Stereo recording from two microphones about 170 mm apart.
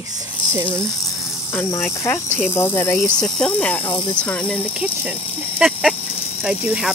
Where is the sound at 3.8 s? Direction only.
30° left (ahead or behind).